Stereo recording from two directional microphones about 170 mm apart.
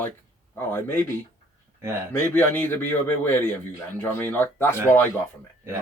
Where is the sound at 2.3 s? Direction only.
10° left (ahead or behind).